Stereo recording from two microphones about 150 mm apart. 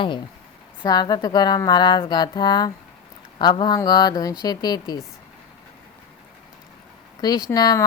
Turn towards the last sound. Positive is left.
turn(degrees=25)  # may be behind; listen again after turning